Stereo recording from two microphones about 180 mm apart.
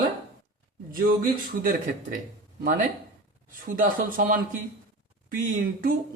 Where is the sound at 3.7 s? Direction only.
50° right (ahead or behind).